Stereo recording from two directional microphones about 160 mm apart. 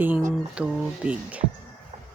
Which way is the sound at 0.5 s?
5° right (ahead or behind).